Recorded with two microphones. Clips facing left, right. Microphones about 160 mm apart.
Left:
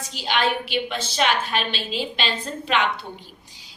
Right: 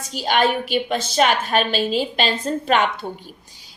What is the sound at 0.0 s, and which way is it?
A woman's voice, 45° right (ahead or behind).